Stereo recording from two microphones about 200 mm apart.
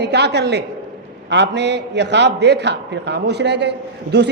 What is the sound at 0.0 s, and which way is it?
A man's voice, 55° right (ahead or behind).